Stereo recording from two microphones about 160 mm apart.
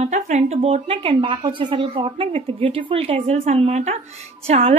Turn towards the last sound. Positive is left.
turn(degrees=-40)  # may be behind; listen again after turning